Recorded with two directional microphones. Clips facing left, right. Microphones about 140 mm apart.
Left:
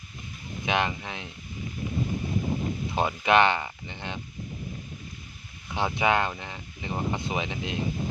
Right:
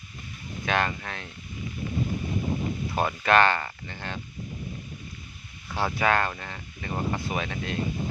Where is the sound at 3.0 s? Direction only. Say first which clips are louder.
Even; 15° left (ahead or behind).